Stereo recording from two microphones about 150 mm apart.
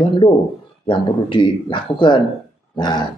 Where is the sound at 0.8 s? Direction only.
35° left (ahead or behind).